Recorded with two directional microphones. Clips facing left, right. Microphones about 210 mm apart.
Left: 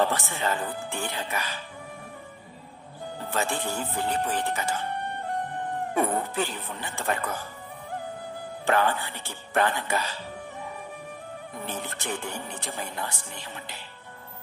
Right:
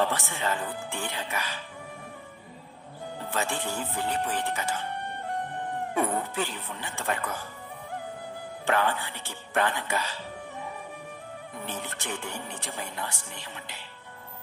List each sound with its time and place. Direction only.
0.0 s speech: 35° left (ahead or behind)
3.3 s speech: 40° left (ahead or behind)
5.9 s speech: 40° left (ahead or behind)
8.6 s speech: 40° left (ahead or behind)
11.5 s speech: 40° left (ahead or behind)